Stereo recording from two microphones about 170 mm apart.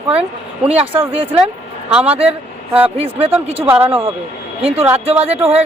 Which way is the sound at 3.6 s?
10° right (ahead or behind).